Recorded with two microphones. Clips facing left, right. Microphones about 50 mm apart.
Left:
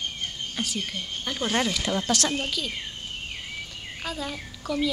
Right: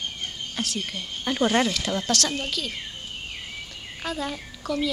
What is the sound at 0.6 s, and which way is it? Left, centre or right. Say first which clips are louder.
Speech: right 1 dB; centre.